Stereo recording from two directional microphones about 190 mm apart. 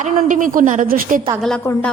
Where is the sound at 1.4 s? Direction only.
5° left (ahead or behind).